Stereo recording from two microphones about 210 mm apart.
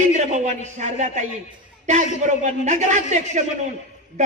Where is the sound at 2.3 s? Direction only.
35° right (ahead or behind).